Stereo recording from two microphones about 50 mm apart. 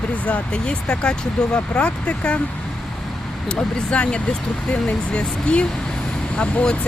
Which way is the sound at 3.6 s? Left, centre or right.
Left.